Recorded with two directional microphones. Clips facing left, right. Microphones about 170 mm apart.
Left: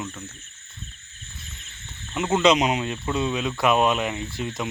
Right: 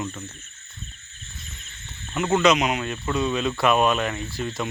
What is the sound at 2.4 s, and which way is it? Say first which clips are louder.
Speech: left 3 dB; 30° left (ahead or behind).